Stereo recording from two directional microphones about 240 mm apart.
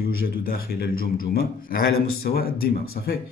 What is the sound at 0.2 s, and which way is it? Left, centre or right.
A man's voice, left.